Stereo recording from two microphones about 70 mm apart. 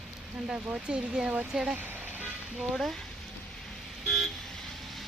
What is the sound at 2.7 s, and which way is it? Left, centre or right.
Speech, centre.